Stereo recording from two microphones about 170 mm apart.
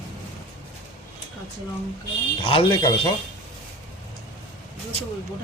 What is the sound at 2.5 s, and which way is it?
Speech, 30° left (ahead or behind).